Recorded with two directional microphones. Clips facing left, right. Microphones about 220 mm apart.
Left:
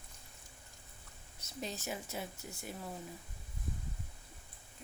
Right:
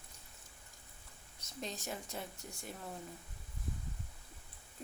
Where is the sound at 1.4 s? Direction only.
5° left (ahead or behind).